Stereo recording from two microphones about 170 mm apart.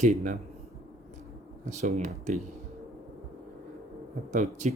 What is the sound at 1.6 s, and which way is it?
Speech, 45° right (ahead or behind).